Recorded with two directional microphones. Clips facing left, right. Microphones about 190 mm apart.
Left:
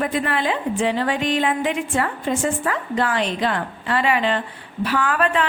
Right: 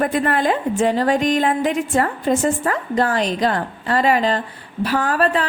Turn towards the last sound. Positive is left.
turn(degrees=-35)  # may be behind; listen again after turning